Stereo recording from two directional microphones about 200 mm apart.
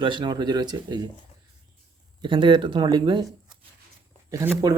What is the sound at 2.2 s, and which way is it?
Speech, 25° right (ahead or behind).